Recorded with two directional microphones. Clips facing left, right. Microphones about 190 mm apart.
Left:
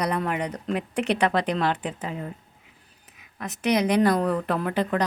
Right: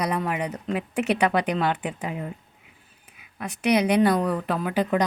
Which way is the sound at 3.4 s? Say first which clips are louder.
Right 1 dB; 10° right (ahead or behind).